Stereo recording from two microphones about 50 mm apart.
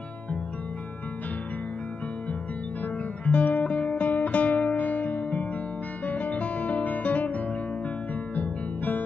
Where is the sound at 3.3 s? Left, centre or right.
Left.